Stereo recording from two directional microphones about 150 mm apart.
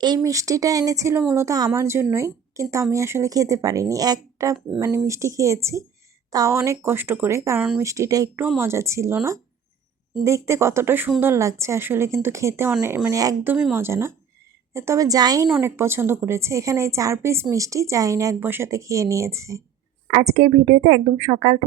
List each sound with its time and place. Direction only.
0.0 s a woman's voice: 25° right (ahead or behind)
20.1 s a woman's voice: 45° right (ahead or behind)
21.2 s a woman's voice: 45° right (ahead or behind)